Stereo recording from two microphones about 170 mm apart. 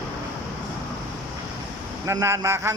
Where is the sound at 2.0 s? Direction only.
15° right (ahead or behind).